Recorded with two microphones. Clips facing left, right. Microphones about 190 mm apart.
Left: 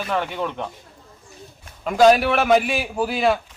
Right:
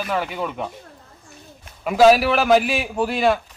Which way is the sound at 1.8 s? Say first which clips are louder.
Right 1 dB; 5° right (ahead or behind).